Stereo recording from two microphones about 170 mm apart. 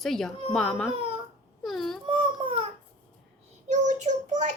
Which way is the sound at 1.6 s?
Centre (ahead or behind).